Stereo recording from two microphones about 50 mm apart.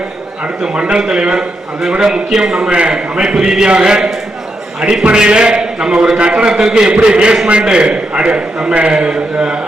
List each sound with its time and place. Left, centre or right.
0.8 s a man's voice: centre